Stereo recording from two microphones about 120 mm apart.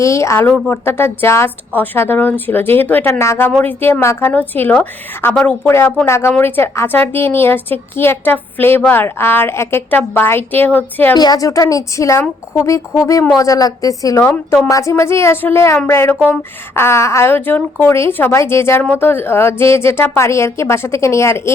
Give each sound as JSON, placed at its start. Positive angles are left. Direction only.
{"t": 0.0, "sound": "a woman's voice", "side_deg": 25}
{"t": 5.6, "sound": "a woman's voice", "side_deg": 20}
{"t": 11.2, "sound": "a woman's voice", "side_deg": 30}
{"t": 13.3, "sound": "a woman's voice", "side_deg": 30}
{"t": 14.2, "sound": "a woman's voice", "side_deg": 15}